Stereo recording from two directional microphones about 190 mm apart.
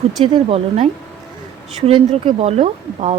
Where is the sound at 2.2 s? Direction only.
30° right (ahead or behind).